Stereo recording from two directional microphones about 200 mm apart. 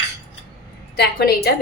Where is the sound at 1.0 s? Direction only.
50° left (ahead or behind).